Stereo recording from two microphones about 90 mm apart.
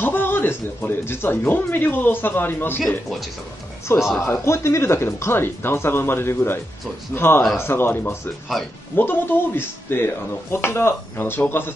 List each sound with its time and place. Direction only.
0.0 s speech: 25° left (ahead or behind)
3.9 s speech: 25° left (ahead or behind)